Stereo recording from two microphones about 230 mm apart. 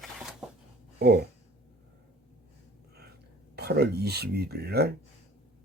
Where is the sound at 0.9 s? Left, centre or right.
Right.